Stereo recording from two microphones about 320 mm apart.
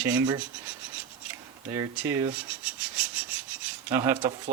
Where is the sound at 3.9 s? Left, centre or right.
Centre.